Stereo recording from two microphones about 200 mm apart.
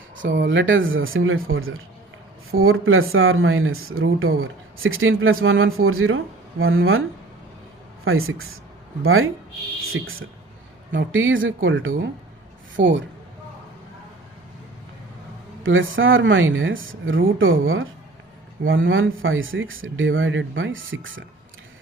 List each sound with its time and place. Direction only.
0.2 s speech: 65° right (ahead or behind); by 7.0 s 90° right
8.0 s speech: 90° right
10.9 s speech: 70° right (ahead or behind)
15.6 s speech: 75° right (ahead or behind)